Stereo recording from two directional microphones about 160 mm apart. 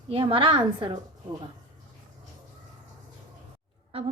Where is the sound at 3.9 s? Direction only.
35° right (ahead or behind).